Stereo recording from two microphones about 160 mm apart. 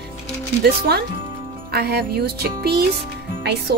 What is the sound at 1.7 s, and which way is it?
Music, 80° right.